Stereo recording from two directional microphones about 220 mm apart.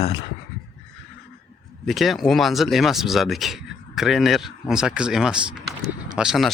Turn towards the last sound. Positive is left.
turn(degrees=0)  # may be behind; listen again after turning